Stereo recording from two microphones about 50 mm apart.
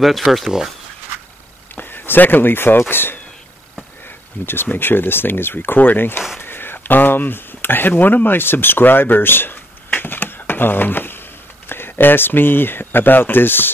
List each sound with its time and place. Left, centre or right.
0.0 s speech: centre
1.8 s speech: left
4.7 s speech: left